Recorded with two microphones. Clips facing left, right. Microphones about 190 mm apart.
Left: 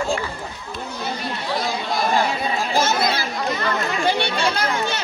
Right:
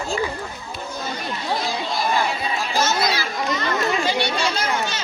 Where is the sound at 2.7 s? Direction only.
55° left (ahead or behind).